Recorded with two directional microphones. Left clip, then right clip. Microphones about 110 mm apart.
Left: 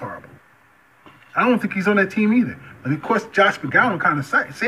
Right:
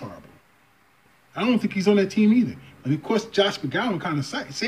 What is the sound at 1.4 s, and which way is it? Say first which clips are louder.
Speech: left 3 dB; 35° right (ahead or behind).